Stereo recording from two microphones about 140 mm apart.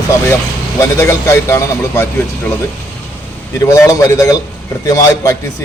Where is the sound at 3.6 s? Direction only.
25° left (ahead or behind).